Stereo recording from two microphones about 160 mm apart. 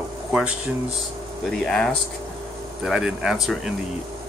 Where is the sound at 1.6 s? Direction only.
5° left (ahead or behind).